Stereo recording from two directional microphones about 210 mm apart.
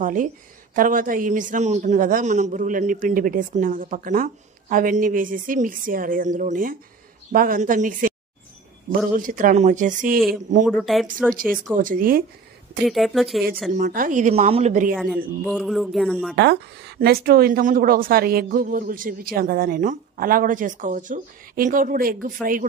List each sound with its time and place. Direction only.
0.0 s a man's voice: 40° right (ahead or behind)
9.1 s a man's voice: 40° right (ahead or behind)
10.6 s speech: centre (ahead or behind)
11.7 s a man's voice: 40° right (ahead or behind)
12.8 s speech: centre (ahead or behind)
13.7 s a man's voice: 40° right (ahead or behind)
15.4 s speech: centre (ahead or behind)
16.3 s a woman's voice: 55° right (ahead or behind)